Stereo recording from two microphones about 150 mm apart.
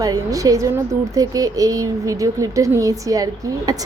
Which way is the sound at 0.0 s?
25° right (ahead or behind).